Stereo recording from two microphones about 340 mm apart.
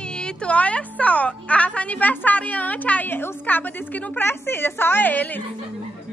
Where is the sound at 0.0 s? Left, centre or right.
Centre.